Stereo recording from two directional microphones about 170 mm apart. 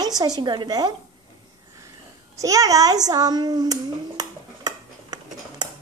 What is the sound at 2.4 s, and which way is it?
Hands, 20° right (ahead or behind).